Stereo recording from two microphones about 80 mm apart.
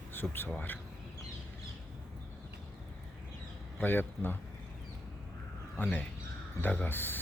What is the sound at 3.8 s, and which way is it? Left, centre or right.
Speech, left.